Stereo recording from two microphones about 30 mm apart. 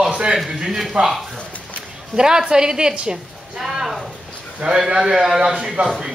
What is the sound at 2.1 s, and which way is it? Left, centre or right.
A woman's voice, right.